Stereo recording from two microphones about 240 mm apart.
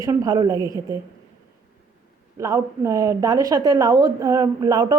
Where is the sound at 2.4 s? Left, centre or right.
Centre.